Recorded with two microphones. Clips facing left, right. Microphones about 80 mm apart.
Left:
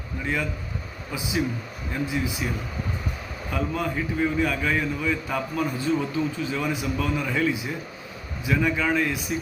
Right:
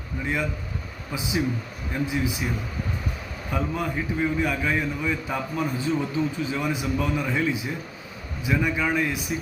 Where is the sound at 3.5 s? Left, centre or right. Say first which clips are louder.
Even; right.